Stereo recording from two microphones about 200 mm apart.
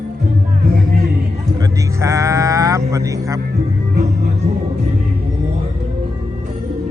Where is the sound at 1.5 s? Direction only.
15° right (ahead or behind).